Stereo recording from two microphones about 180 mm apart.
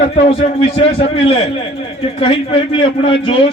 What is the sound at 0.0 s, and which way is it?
A man's voice, 30° left (ahead or behind).